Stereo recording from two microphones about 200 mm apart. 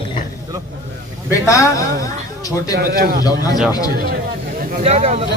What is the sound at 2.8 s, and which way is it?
Speech, 50° right (ahead or behind).